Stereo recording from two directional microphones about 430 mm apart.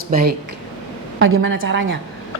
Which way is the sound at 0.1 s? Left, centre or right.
Centre.